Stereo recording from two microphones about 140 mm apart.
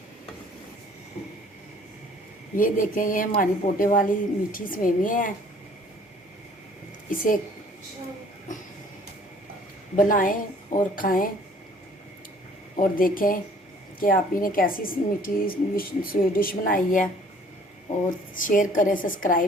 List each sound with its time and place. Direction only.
2.6 s a woman's voice: 75° left (ahead or behind)
7.1 s a woman's voice: 75° left (ahead or behind)
9.9 s a woman's voice: 75° left (ahead or behind)
12.8 s a woman's voice: 85° left
18.3 s a woman's voice: 70° left (ahead or behind)